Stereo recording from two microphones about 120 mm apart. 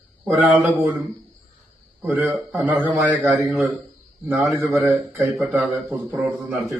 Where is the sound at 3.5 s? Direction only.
Centre (ahead or behind).